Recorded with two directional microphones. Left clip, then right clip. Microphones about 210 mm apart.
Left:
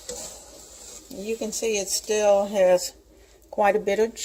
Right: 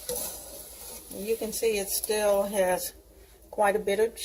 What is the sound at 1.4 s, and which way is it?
Speech, 35° left (ahead or behind).